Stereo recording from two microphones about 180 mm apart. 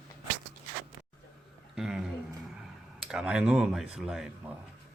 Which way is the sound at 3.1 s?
5° right (ahead or behind).